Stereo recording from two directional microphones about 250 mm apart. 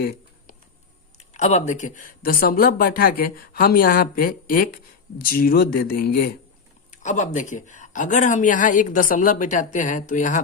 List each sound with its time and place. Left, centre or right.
1.2 s speech: left